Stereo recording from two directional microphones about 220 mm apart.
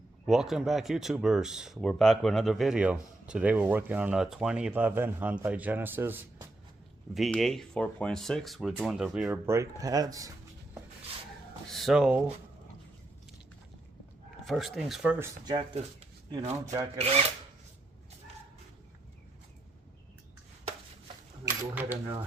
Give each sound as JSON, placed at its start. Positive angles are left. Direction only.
{"t": 0.3, "sound": "speech", "side_deg": 0}
{"t": 11.7, "sound": "speech", "side_deg": 0}
{"t": 14.4, "sound": "speech", "side_deg": 0}
{"t": 15.2, "sound": "rub", "side_deg": -20}
{"t": 21.6, "sound": "typewriter", "side_deg": -10}